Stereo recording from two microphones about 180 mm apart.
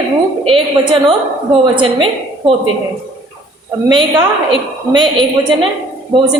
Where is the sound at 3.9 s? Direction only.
25° right (ahead or behind).